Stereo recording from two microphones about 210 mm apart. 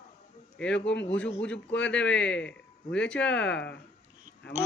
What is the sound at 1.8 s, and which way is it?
A man's voice, 5° left (ahead or behind).